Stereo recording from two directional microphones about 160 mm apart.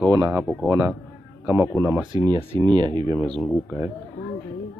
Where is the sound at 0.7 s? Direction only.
20° right (ahead or behind).